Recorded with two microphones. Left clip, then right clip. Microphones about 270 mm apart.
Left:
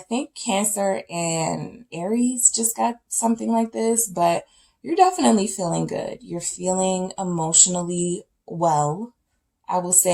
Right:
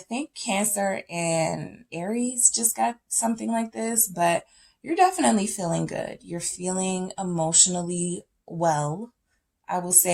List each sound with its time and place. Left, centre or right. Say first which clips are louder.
0.1 s speech: left 4 dB; right